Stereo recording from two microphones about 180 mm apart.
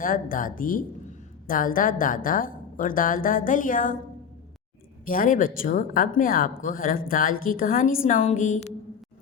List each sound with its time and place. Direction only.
0.0 s speech: 50° left (ahead or behind)
5.0 s a woman's voice: 50° left (ahead or behind)